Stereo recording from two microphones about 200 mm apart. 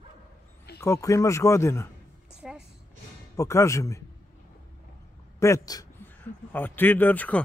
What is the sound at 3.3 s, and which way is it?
Speech, 15° left (ahead or behind).